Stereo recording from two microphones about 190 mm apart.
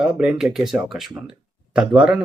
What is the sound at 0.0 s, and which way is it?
Speech, 5° right (ahead or behind).